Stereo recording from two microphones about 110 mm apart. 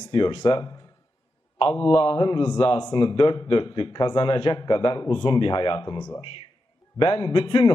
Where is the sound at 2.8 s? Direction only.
45° left (ahead or behind).